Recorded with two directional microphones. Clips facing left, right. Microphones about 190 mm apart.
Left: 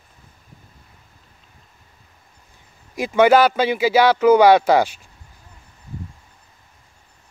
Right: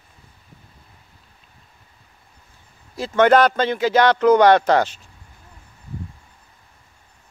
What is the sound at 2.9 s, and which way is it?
Speech, 10° left (ahead or behind).